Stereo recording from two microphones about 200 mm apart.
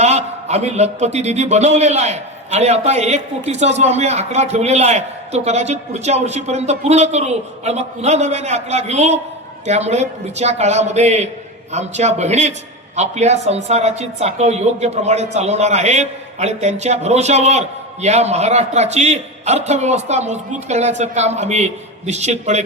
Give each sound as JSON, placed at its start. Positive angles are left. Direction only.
{"t": 0.0, "sound": "speech", "side_deg": -35}